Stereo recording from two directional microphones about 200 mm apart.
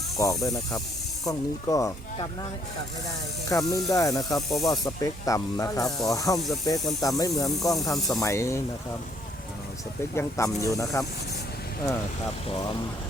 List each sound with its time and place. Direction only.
1.2 s speech: 15° left (ahead or behind)
3.5 s speech: 15° left (ahead or behind)
4.4 s speech: centre (ahead or behind)
4.8 s speech: 15° left (ahead or behind)
10.2 s speech: 15° left (ahead or behind)
12.5 s speech: 20° left (ahead or behind)